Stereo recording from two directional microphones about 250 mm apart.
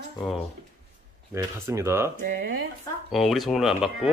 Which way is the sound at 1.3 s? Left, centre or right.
Centre.